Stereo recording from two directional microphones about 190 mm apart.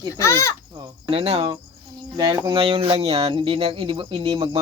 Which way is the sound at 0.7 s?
30° right (ahead or behind).